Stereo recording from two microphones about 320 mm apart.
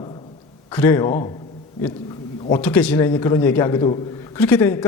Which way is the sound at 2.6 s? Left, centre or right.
Centre.